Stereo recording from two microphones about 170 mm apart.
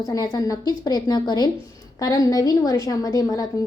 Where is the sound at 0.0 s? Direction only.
20° left (ahead or behind).